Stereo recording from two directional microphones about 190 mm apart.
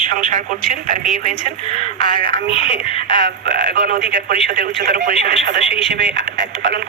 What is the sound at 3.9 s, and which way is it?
Speech, 45° right (ahead or behind).